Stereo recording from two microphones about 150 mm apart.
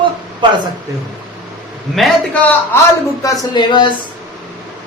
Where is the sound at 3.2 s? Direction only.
30° left (ahead or behind).